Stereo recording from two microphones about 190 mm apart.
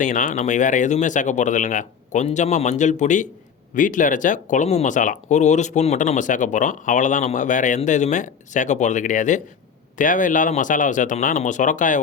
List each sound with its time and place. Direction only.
0.0 s speech: 45° left (ahead or behind)